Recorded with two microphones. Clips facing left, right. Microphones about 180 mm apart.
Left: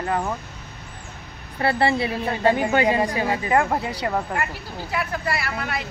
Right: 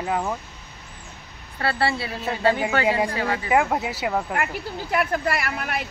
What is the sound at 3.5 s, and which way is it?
Speech, 5° right (ahead or behind).